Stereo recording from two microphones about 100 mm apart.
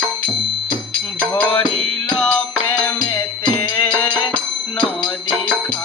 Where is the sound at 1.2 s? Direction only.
15° left (ahead or behind).